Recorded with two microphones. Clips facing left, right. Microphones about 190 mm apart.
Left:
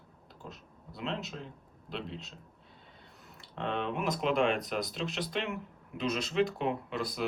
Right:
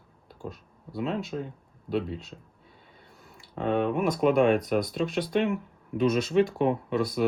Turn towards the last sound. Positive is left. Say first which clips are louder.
# right 8 dB
turn(degrees=-55)  # may be behind; listen again after turning